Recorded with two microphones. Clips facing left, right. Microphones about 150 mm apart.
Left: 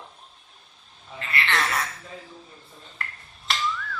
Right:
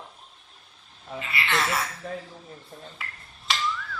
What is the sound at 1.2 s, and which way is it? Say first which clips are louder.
Speech: left 1 dB; 5° right (ahead or behind).